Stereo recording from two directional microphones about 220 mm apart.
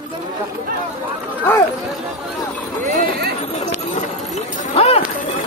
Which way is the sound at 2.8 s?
45° right (ahead or behind).